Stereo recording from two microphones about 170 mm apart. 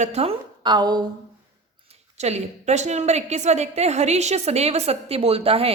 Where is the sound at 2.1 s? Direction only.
40° right (ahead or behind).